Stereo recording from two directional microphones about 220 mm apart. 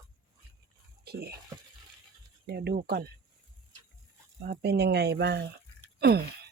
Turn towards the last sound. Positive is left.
turn(degrees=-50)  # may be behind; listen again after turning